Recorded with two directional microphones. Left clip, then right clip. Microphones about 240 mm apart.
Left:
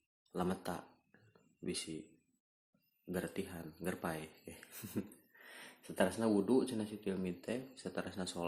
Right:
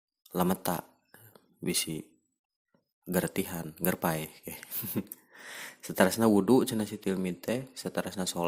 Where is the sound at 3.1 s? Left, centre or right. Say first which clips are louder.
Right 10 dB; right.